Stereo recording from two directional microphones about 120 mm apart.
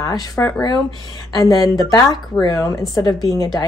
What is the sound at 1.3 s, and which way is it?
Speech, 30° left (ahead or behind).